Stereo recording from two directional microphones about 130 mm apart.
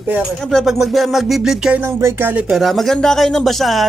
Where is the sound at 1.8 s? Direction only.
20° right (ahead or behind).